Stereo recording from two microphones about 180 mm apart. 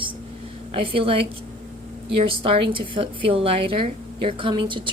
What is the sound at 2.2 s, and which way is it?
A woman's voice, 30° right (ahead or behind).